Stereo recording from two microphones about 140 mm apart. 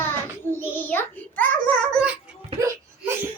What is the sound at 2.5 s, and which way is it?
Hiccup, 20° right (ahead or behind).